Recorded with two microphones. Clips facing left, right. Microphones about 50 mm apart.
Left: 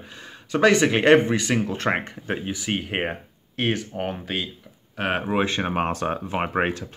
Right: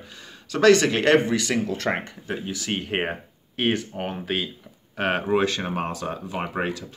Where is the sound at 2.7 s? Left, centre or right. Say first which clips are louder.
Even; centre.